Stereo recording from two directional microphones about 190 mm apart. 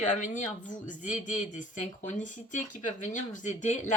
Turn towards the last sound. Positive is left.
turn(degrees=40)  # may be behind; listen again after turning